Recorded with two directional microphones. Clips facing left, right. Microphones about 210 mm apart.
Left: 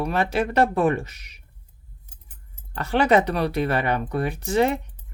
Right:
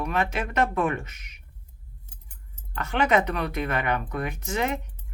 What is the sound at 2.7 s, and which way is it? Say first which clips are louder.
Speech: left 4 dB; 35° left (ahead or behind).